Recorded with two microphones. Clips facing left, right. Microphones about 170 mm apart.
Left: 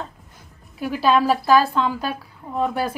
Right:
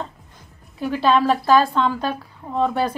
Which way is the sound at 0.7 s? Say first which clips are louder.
Right 1 dB; 5° left (ahead or behind).